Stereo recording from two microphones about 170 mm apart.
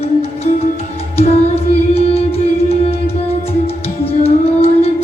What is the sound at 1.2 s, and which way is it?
Music, 35° left (ahead or behind).